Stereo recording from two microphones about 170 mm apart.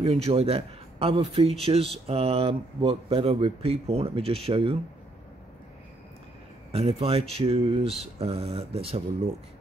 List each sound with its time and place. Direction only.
0.0 s a man's voice: 35° right (ahead or behind)
6.7 s speech: 35° right (ahead or behind)